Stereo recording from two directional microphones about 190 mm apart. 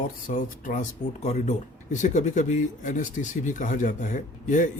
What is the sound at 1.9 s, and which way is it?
Speech, 40° left (ahead or behind).